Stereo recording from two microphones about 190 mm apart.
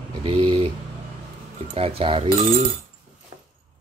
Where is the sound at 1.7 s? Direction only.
30° right (ahead or behind).